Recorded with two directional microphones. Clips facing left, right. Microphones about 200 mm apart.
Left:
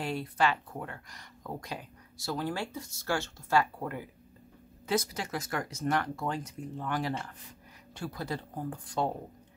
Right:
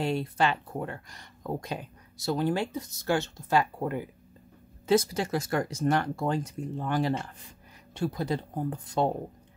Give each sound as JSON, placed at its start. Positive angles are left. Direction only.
{"t": 0.0, "sound": "speech", "side_deg": -25}